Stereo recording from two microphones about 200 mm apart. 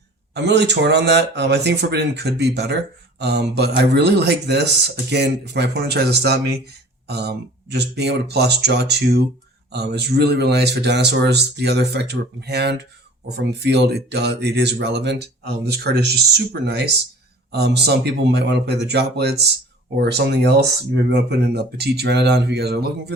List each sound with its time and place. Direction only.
0.3 s speech: 60° right (ahead or behind)